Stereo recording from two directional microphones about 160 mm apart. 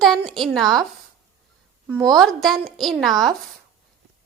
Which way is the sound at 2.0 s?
Centre (ahead or behind).